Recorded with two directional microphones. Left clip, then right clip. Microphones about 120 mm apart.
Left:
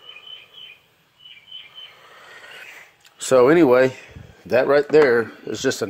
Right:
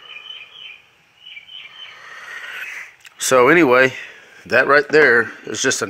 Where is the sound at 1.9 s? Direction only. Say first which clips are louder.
Right 9 dB; 10° left (ahead or behind).